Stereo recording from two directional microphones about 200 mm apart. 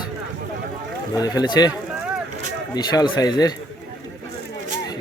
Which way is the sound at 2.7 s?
20° left (ahead or behind).